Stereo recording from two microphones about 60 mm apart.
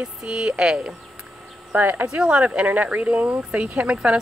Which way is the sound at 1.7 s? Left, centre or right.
Right.